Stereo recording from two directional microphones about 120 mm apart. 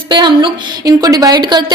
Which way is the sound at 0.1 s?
40° right (ahead or behind).